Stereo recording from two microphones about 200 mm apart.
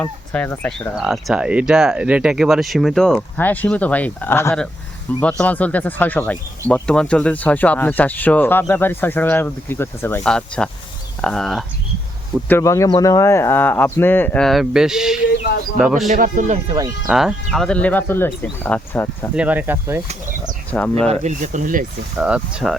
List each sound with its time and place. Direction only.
0.0 s speech: 10° left (ahead or behind)
0.9 s speech: 5° right (ahead or behind)
12.5 s speech: 15° left (ahead or behind); by 16.0 s 5° right (ahead or behind)
16.0 s speech: 45° right (ahead or behind)
17.1 s speech: 5° right (ahead or behind)
19.4 s speech: 10° right (ahead or behind)
20.7 s speech: 5° left (ahead or behind)
21.1 s speech: 35° right (ahead or behind)
22.2 s speech: 5° right (ahead or behind)